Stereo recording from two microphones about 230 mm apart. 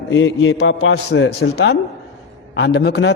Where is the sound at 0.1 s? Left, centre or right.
Left.